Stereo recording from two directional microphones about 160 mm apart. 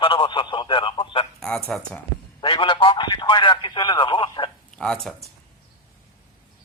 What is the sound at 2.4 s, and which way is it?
A man's voice, 35° left (ahead or behind).